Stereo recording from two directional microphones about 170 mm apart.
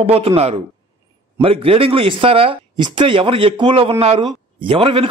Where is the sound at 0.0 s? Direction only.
35° right (ahead or behind).